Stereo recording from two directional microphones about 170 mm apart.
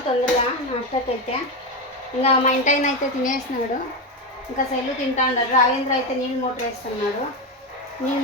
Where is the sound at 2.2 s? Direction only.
45° left (ahead or behind).